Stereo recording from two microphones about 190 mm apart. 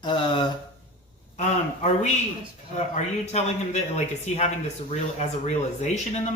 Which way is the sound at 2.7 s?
35° left (ahead or behind).